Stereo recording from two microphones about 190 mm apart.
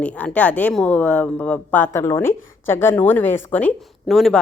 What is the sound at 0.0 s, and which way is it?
A woman's voice, 5° left (ahead or behind).